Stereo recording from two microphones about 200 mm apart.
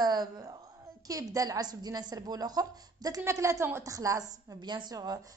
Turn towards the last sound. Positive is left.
turn(degrees=-20)  # may be behind; listen again after turning